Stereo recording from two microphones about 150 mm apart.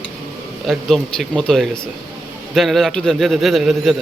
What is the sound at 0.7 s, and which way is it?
A man's voice, centre (ahead or behind).